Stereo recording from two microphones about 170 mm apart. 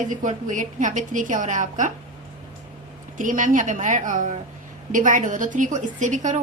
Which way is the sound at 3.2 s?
50° right (ahead or behind).